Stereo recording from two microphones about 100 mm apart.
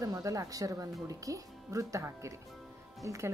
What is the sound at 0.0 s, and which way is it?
Speech, 35° right (ahead or behind).